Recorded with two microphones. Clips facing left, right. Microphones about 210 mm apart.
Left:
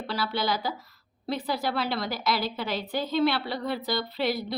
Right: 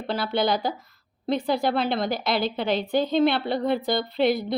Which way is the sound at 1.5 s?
25° right (ahead or behind).